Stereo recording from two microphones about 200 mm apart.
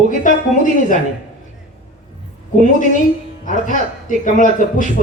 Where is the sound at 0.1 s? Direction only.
40° left (ahead or behind).